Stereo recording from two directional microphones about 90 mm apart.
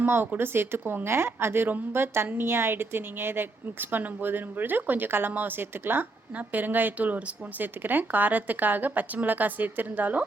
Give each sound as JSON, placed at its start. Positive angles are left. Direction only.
{"t": 0.0, "sound": "speech", "side_deg": -25}